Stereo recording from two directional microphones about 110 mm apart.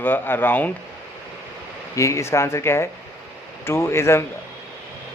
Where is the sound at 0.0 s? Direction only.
20° left (ahead or behind).